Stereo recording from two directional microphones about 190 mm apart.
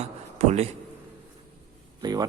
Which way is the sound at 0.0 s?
35° right (ahead or behind).